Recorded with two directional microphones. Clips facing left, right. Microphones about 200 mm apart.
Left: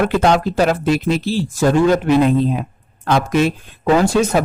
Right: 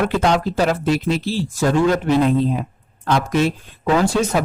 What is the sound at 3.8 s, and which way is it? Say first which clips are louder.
Speech: left 3 dB; 45° left (ahead or behind).